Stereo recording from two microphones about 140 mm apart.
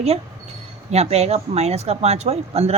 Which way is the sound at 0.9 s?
50° right (ahead or behind).